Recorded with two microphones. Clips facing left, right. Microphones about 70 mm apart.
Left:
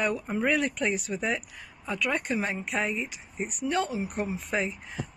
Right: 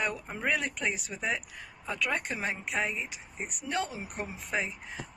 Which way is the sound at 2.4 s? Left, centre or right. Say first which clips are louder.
Left 2 dB; centre.